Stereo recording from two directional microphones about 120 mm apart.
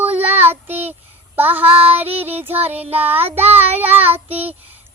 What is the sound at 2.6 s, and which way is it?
Child singing, 60° right (ahead or behind).